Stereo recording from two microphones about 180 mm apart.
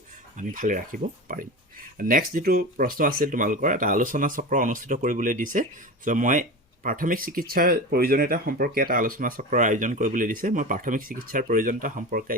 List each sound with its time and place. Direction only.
0.3 s speech: 45° right (ahead or behind)
2.0 s speech: 50° right (ahead or behind)